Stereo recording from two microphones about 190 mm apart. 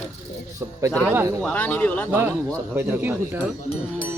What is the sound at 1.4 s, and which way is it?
Speech, 5° left (ahead or behind).